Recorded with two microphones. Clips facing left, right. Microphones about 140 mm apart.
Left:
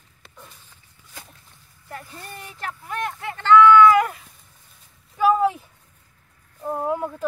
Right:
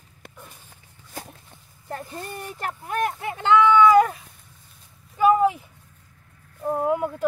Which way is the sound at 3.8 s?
15° right (ahead or behind).